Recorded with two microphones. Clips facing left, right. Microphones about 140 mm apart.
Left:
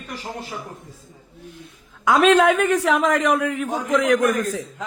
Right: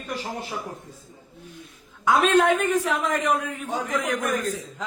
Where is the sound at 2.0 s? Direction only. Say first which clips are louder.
Left 4 dB; 90° left.